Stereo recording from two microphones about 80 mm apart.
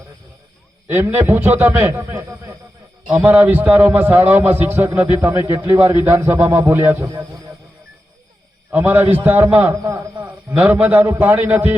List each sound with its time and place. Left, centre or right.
0.9 s a man's voice: right
7.1 s a sound: right
8.7 s a man's voice: right